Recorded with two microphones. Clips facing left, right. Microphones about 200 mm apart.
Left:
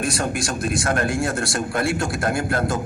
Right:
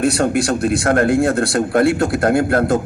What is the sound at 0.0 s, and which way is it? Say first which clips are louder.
A man's voice: right 8 dB; 60° right (ahead or behind).